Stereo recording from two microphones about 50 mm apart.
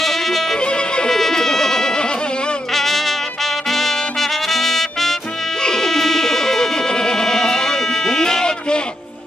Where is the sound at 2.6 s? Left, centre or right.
Centre.